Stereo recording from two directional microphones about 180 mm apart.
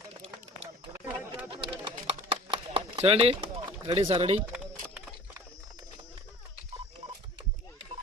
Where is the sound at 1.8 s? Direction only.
35° right (ahead or behind).